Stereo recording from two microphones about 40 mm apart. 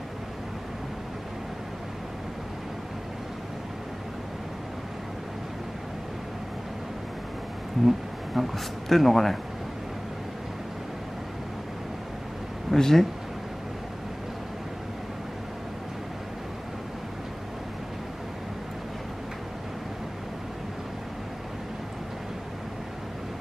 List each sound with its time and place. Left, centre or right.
7.8 s speech: centre
12.7 s speech: centre